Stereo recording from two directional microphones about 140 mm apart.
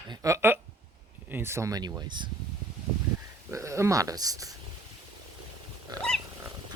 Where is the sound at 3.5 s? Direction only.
20° right (ahead or behind).